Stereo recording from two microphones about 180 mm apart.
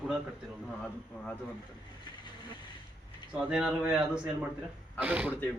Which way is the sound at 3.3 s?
5° right (ahead or behind).